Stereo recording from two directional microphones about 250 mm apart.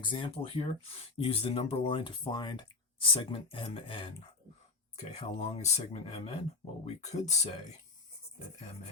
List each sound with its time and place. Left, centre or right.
0.0 s speech: centre